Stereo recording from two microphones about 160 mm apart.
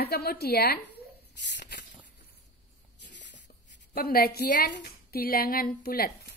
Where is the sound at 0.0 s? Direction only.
80° left.